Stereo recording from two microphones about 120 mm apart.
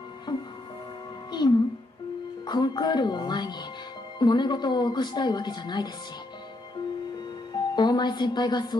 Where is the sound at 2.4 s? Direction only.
35° left (ahead or behind).